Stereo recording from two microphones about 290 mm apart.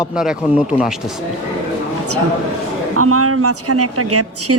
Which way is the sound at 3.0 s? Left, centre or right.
Right.